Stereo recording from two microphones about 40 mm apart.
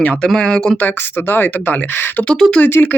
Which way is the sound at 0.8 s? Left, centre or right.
Left.